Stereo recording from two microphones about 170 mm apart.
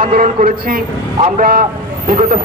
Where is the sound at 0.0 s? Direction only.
55° right (ahead or behind).